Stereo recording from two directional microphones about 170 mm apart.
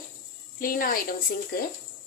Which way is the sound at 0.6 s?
55° left (ahead or behind).